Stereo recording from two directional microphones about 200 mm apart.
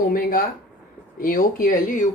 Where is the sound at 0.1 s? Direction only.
45° left (ahead or behind).